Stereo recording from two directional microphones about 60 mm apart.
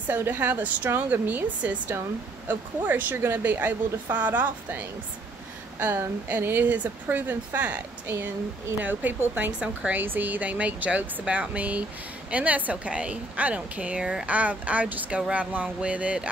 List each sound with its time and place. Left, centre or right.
0.2 s a woman's voice: right
6.2 s a woman's voice: right